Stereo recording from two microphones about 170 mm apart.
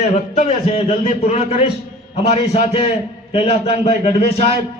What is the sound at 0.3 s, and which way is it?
A man's voice, 35° left (ahead or behind).